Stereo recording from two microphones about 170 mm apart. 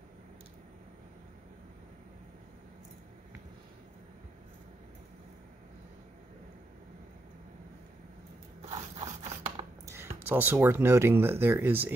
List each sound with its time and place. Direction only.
8.6 s scrape: 40° right (ahead or behind)
9.8 s speech: 15° right (ahead or behind)